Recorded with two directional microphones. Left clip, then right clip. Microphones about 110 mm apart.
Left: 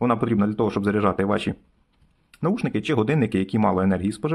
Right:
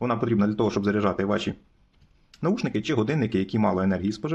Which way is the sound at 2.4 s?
20° left (ahead or behind).